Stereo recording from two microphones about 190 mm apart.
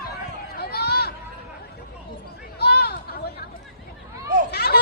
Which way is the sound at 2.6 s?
60° left (ahead or behind).